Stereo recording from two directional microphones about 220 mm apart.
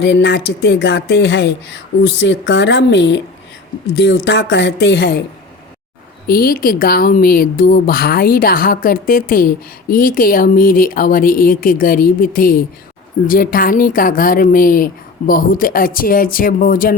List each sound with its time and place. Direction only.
0.0 s speech: 50° left (ahead or behind)
6.2 s a woman's voice: 45° left (ahead or behind)